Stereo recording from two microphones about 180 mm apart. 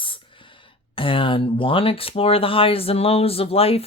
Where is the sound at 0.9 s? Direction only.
30° left (ahead or behind).